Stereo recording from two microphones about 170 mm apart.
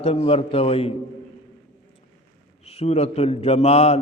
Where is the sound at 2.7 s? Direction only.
40° left (ahead or behind).